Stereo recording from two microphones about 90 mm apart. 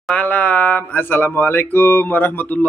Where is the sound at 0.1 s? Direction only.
15° left (ahead or behind).